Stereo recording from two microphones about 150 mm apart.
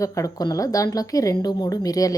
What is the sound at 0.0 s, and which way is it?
Speech, 20° left (ahead or behind).